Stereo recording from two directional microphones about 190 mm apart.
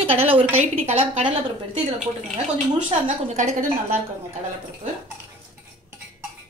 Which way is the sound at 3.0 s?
35° right (ahead or behind).